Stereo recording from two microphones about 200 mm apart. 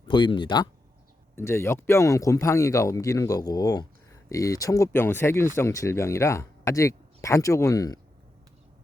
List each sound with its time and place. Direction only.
0.0 s speech: 25° left (ahead or behind)